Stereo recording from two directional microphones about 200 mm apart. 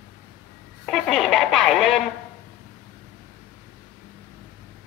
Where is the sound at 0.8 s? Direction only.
Centre (ahead or behind).